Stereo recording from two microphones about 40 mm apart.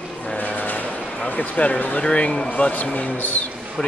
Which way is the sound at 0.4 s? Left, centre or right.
Left.